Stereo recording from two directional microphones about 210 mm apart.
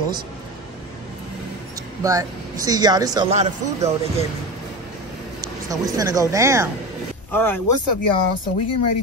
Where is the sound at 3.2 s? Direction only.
30° right (ahead or behind).